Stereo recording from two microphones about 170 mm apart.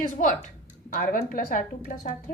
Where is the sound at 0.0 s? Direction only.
50° left (ahead or behind).